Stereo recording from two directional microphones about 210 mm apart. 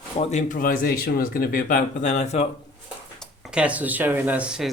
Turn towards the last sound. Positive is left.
turn(degrees=-5)  # may be behind; listen again after turning